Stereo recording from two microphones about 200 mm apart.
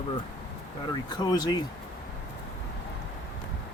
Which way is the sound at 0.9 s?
20° left (ahead or behind).